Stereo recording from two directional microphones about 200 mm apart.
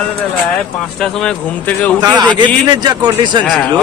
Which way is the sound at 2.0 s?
20° right (ahead or behind).